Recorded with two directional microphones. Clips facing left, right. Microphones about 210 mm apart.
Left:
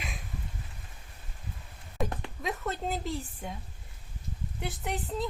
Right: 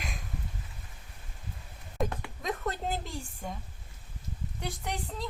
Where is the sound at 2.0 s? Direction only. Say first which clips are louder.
Even; centre (ahead or behind).